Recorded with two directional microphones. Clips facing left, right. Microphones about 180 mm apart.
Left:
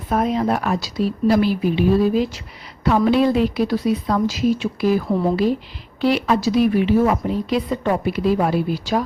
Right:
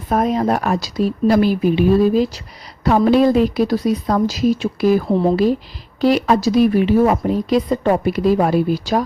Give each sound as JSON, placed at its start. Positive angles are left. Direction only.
{"t": 0.1, "sound": "a woman's voice", "side_deg": -45}